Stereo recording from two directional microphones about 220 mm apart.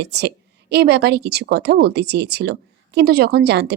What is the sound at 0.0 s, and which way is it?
A woman's voice, 50° right (ahead or behind).